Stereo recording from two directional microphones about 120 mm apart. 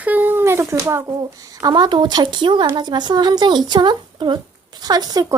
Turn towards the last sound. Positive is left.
turn(degrees=-30)  # may be behind; listen again after turning